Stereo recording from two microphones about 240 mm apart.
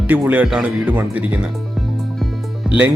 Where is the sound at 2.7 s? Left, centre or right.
Centre.